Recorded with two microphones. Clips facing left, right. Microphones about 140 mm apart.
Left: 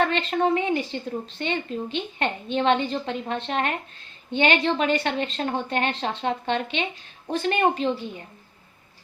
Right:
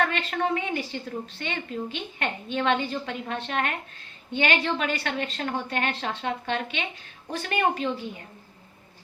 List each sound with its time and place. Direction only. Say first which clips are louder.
0.0 s a woman's voice: left 4 dB; 25° left (ahead or behind)